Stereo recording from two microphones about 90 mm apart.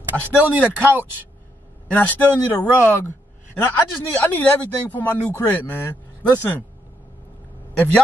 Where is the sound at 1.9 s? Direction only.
15° left (ahead or behind).